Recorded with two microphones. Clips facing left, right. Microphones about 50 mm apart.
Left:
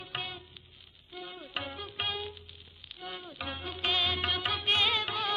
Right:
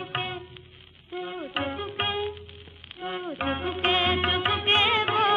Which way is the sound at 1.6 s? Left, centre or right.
Right.